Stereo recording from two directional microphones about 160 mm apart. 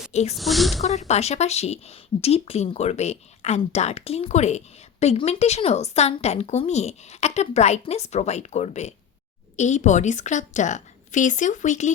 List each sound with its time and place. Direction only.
0.1 s speech: 45° left (ahead or behind)
0.3 s speech: centre (ahead or behind)
0.8 s speech: 45° left (ahead or behind)